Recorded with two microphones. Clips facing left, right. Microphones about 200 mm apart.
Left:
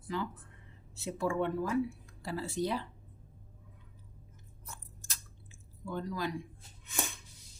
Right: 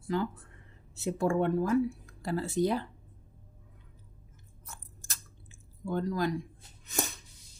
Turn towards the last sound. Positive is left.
turn(degrees=-40)  # may be behind; listen again after turning